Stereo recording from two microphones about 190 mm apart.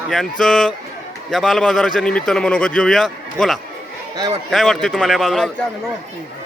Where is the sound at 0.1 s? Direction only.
Centre (ahead or behind).